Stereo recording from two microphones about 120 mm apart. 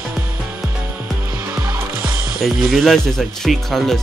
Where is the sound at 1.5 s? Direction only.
35° right (ahead or behind).